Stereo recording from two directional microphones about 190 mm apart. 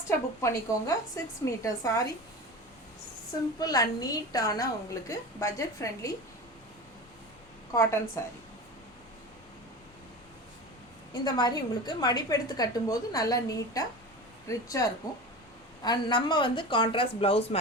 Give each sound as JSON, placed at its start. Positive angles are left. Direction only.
{"t": 0.4, "sound": "a woman's voice", "side_deg": 15}
{"t": 3.6, "sound": "a woman's voice", "side_deg": 20}
{"t": 7.7, "sound": "a woman's voice", "side_deg": 15}
{"t": 11.1, "sound": "a woman's voice", "side_deg": 20}